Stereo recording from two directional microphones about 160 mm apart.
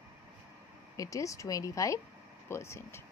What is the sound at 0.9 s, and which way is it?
A woman's voice, 20° left (ahead or behind).